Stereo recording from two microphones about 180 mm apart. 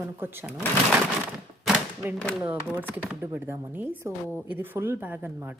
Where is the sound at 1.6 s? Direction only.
5° right (ahead or behind).